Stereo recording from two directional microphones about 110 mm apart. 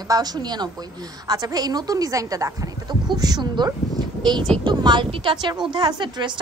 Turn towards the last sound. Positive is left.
turn(degrees=-45)  # may be behind; listen again after turning